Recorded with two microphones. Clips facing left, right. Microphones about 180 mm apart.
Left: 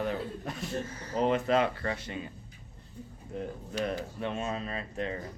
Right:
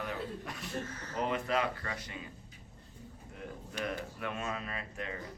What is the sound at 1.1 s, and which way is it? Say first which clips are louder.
Speech: left 7 dB; 30° left (ahead or behind).